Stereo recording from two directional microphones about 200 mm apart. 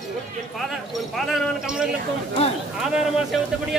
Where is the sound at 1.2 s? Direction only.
Centre (ahead or behind).